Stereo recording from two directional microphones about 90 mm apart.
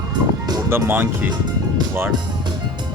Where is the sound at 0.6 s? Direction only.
25° right (ahead or behind).